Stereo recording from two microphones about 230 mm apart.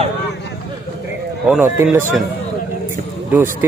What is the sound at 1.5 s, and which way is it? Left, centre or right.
Speech, centre.